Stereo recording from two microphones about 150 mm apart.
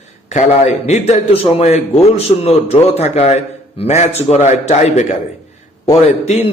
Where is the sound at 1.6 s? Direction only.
45° left (ahead or behind).